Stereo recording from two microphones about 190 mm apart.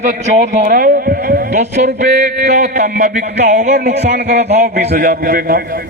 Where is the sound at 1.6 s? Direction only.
35° right (ahead or behind).